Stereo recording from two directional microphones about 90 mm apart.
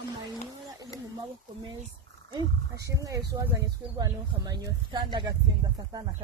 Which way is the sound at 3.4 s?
30° right (ahead or behind).